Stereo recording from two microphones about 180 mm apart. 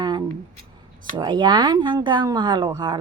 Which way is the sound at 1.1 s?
25° right (ahead or behind).